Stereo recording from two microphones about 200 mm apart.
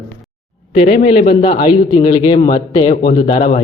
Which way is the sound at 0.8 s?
45° left (ahead or behind).